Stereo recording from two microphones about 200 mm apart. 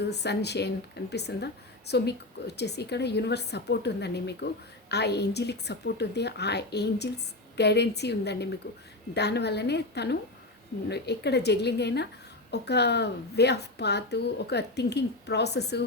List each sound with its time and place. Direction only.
0.1 s a woman's voice: 55° left (ahead or behind)